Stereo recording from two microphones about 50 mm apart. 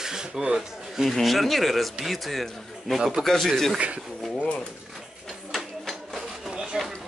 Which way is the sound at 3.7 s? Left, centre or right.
Right.